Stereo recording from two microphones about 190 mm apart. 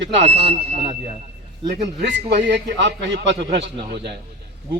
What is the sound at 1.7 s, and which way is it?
A man's voice, 60° right (ahead or behind).